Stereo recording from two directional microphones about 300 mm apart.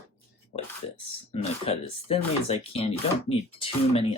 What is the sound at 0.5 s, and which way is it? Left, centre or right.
Speech, left.